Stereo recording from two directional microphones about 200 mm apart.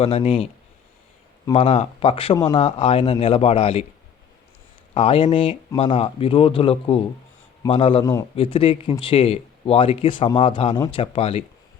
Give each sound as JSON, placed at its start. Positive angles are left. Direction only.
{"t": 0.0, "sound": "speech", "side_deg": 30}
{"t": 1.5, "sound": "speech", "side_deg": 30}
{"t": 4.9, "sound": "speech", "side_deg": 30}
{"t": 8.0, "sound": "speech", "side_deg": 15}
{"t": 8.4, "sound": "speech", "side_deg": 25}